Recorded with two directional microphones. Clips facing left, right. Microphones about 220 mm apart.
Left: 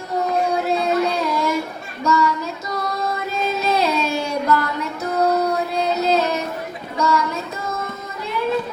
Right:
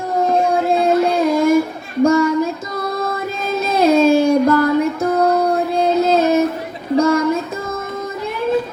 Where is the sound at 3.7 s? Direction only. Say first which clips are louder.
Right 14 dB; 50° right (ahead or behind).